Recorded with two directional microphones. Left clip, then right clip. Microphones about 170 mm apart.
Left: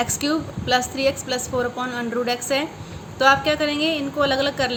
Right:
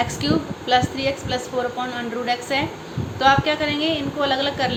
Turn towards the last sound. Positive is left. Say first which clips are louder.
# left 1 dB
turn(degrees=35)  # may be behind; listen again after turning